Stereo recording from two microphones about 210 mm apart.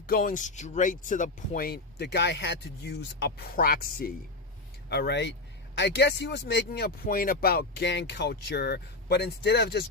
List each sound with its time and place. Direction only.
0.1 s speech: 40° left (ahead or behind)